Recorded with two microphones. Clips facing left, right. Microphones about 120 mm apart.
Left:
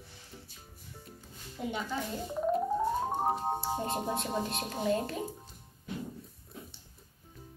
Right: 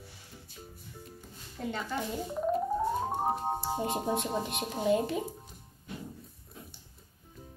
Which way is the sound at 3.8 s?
10° right (ahead or behind).